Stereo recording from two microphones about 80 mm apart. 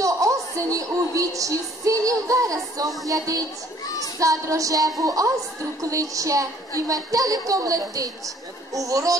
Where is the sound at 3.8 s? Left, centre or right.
Left.